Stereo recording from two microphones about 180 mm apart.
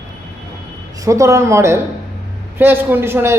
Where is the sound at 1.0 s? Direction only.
15° right (ahead or behind).